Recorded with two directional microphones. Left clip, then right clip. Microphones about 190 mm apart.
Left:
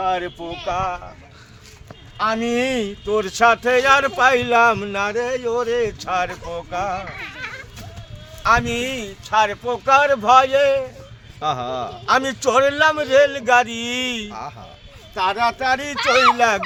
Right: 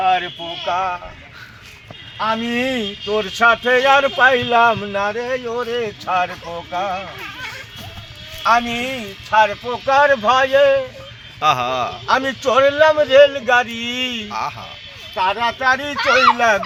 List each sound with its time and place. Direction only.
0.0 s a sound: 60° left (ahead or behind)
0.6 s speech: 35° left (ahead or behind)
2.2 s speech: 30° left (ahead or behind)
9.3 s speech: 15° left (ahead or behind)
11.3 s a man's voice: 5° left (ahead or behind)
12.0 s speech: 25° left (ahead or behind)
14.3 s a man's voice: 5° left (ahead or behind)
15.1 s speech: 25° left (ahead or behind)